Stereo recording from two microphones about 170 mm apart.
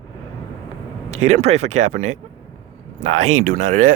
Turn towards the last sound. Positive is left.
turn(degrees=-50)  # may be behind; listen again after turning